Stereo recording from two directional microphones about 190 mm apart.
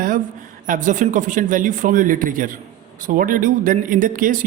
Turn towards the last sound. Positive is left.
turn(degrees=-45)  # may be behind; listen again after turning